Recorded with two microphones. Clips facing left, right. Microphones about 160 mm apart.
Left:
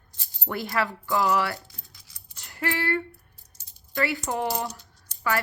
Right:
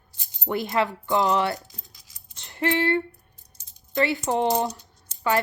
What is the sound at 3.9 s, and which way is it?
Speech, 20° right (ahead or behind).